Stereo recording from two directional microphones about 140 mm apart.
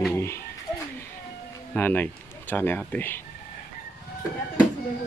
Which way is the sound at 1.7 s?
15° left (ahead or behind).